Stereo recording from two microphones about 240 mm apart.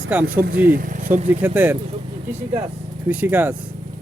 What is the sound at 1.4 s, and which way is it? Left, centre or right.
Speech, centre.